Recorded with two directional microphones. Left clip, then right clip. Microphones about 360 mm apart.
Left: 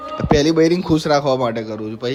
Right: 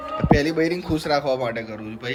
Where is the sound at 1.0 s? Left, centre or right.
Centre.